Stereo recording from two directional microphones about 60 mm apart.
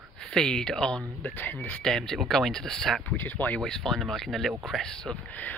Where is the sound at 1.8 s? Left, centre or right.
Centre.